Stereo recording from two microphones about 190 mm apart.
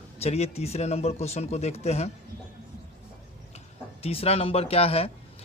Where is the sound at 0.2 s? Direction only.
35° left (ahead or behind).